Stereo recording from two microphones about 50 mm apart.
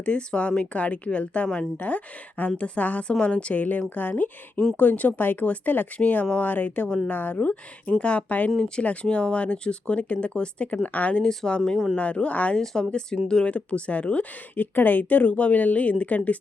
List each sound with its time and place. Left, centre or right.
0.0 s speech: left
1.8 s a woman's voice: left
8.4 s speech: centre
8.8 s speech: left
11.2 s speech: centre
11.9 s speech: left
12.5 s speech: centre
13.2 s speech: centre
14.5 s a woman's voice: left